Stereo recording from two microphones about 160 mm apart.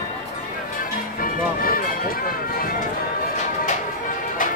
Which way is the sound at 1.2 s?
60° left (ahead or behind).